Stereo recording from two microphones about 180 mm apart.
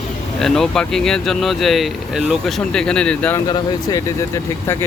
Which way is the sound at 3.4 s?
20° left (ahead or behind).